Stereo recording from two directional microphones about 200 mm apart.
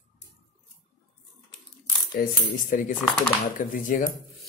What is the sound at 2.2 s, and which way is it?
Speech, 50° left (ahead or behind).